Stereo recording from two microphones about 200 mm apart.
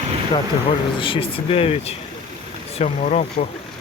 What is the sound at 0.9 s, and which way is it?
Speech, 25° left (ahead or behind).